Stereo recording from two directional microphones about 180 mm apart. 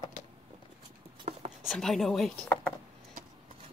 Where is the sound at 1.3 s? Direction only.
35° right (ahead or behind).